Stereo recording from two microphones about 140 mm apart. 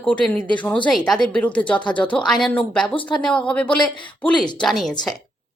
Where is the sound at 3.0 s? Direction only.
35° left (ahead or behind).